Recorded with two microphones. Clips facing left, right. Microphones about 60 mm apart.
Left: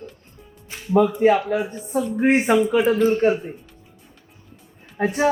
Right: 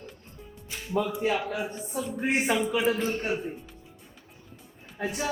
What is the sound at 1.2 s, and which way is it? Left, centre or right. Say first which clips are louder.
Speech: left 10 dB; left.